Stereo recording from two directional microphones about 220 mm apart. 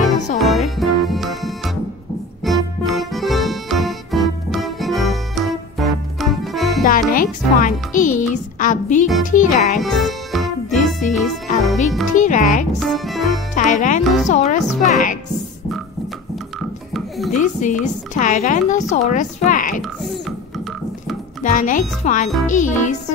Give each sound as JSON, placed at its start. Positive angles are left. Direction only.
{"t": 0.4, "sound": "music", "side_deg": 0}
{"t": 6.8, "sound": "music", "side_deg": 40}
{"t": 9.2, "sound": "a woman's voice", "side_deg": 35}
{"t": 9.8, "sound": "music", "side_deg": 0}
{"t": 10.8, "sound": "music", "side_deg": 35}
{"t": 12.2, "sound": "music", "side_deg": 35}
{"t": 12.8, "sound": "music", "side_deg": 0}
{"t": 13.6, "sound": "speech", "side_deg": 35}
{"t": 14.9, "sound": "music", "side_deg": 35}
{"t": 16.9, "sound": "music", "side_deg": 0}
{"t": 17.4, "sound": "a woman's voice", "side_deg": 35}
{"t": 19.8, "sound": "beatboxing", "side_deg": 0}
{"t": 21.5, "sound": "a woman's voice", "side_deg": 35}